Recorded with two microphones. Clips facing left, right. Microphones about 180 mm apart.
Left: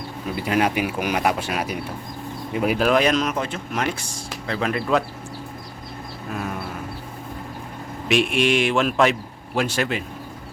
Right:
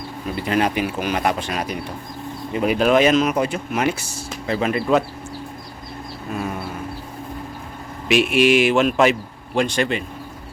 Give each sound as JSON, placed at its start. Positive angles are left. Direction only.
{"t": 0.3, "sound": "speech", "side_deg": 5}
{"t": 8.0, "sound": "speech", "side_deg": -5}